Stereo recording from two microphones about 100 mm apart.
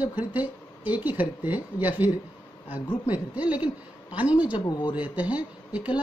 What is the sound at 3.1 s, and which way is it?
A woman's voice, 15° right (ahead or behind).